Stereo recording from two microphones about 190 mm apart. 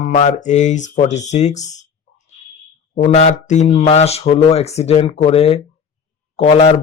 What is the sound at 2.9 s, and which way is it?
Speech, 35° left (ahead or behind).